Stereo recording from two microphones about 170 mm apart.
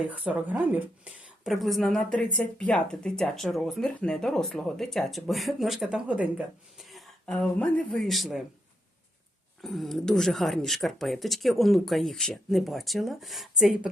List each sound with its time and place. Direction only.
0.0 s speech: 5° right (ahead or behind)
9.6 s speech: centre (ahead or behind)